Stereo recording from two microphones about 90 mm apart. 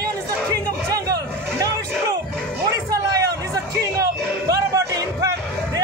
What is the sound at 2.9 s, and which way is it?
Music, 40° right (ahead or behind).